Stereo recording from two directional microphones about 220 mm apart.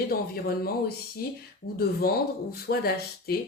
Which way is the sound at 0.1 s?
45° left (ahead or behind).